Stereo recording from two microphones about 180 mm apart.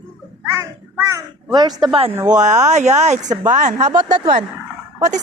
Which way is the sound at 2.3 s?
40° right (ahead or behind).